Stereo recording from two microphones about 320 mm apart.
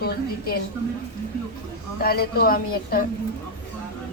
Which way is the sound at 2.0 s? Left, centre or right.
Left.